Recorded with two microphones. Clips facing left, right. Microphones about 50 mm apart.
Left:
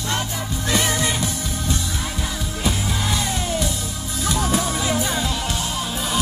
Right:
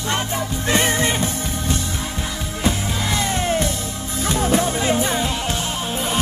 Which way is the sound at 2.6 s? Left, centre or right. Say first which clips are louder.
Right 2 dB; right.